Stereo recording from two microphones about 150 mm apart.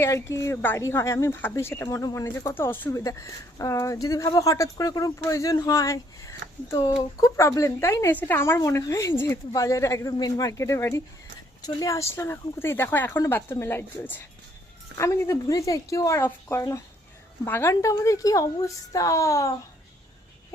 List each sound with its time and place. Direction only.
0.0 s a woman's voice: 20° left (ahead or behind)